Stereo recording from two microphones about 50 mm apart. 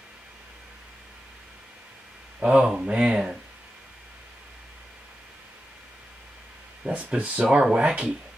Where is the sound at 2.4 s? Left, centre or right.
Centre.